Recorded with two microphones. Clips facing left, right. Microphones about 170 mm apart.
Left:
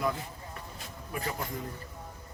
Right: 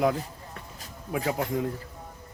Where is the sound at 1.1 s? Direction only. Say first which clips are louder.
Right 8 dB; 90° right.